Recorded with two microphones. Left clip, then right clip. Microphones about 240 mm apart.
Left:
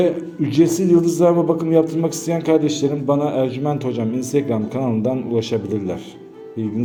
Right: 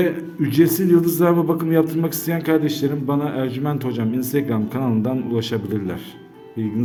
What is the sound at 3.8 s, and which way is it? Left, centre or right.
A man's voice, centre.